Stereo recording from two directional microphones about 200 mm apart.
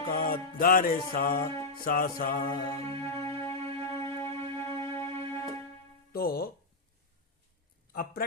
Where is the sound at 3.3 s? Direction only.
15° left (ahead or behind).